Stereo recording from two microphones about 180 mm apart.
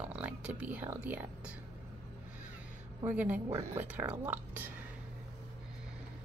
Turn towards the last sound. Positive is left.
turn(degrees=-10)  # may be behind; listen again after turning